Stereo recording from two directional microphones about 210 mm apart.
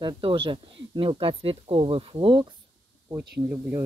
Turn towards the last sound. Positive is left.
turn(degrees=-10)  # may be behind; listen again after turning